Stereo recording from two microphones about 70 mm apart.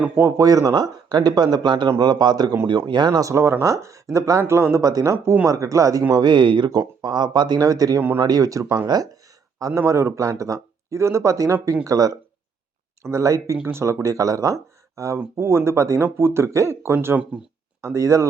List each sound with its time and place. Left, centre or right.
0.3 s speech: right
2.6 s speech: right
3.3 s speech: right
6.1 s speech: right
7.6 s speech: right
8.0 s speech: right
8.3 s speech: right
13.0 s speech: right
15.4 s speech: right